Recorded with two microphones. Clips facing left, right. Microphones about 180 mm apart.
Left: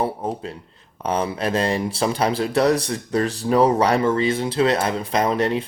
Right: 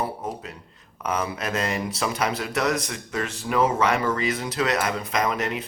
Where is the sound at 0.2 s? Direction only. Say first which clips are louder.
Left 5 dB; 30° left (ahead or behind).